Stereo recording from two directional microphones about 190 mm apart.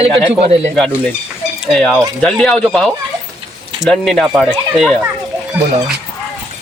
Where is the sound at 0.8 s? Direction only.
10° left (ahead or behind).